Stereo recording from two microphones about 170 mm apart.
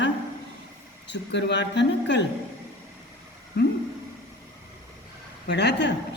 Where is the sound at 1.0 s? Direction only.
90° left.